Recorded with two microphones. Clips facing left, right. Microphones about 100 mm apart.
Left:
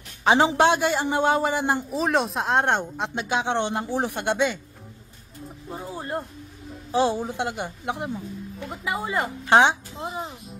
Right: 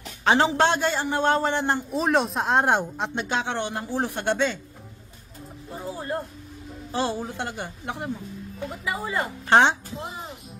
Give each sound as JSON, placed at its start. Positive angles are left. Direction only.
{"t": 0.2, "sound": "a man's voice", "side_deg": 15}
{"t": 3.3, "sound": "a man's voice", "side_deg": 15}
{"t": 6.9, "sound": "a man's voice", "side_deg": 15}